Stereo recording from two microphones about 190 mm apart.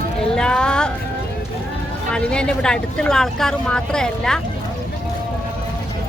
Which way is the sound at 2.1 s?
5° left (ahead or behind).